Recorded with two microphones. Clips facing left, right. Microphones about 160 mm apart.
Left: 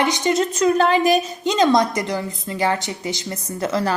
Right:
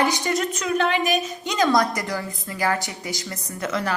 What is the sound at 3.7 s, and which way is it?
Speech, 35° left (ahead or behind).